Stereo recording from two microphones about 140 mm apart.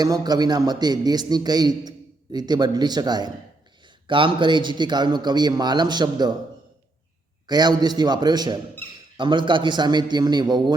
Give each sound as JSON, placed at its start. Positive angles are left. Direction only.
{"t": 0.0, "sound": "a man's voice", "side_deg": -25}
{"t": 7.4, "sound": "a man's voice", "side_deg": -30}
{"t": 8.8, "sound": "speech", "side_deg": 15}
{"t": 9.1, "sound": "a man's voice", "side_deg": -35}